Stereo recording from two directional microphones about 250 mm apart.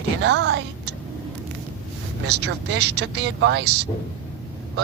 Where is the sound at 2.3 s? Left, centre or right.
Right.